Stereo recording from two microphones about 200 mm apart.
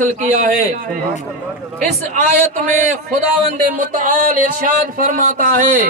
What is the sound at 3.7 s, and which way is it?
Speech, 45° right (ahead or behind).